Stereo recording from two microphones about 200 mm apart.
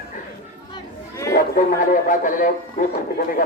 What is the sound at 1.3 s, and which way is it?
Speech, 45° left (ahead or behind).